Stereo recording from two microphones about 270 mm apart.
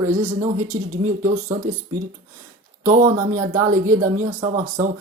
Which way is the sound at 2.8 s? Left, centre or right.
Right.